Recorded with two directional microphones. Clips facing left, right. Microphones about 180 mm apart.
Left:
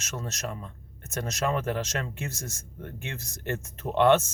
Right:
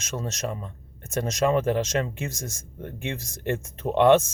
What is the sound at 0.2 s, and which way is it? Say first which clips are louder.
Speech: right 4 dB; 15° right (ahead or behind).